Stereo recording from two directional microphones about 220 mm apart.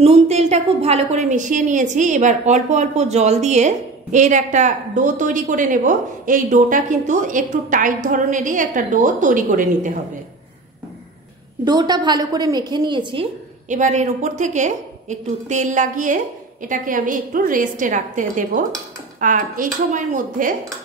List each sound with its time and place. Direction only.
0.0 s a woman's voice: 30° right (ahead or behind)
11.6 s a woman's voice: 20° right (ahead or behind); by 20.5 s 35° right (ahead or behind)